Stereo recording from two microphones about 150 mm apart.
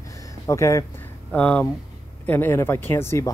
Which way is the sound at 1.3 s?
10° left (ahead or behind).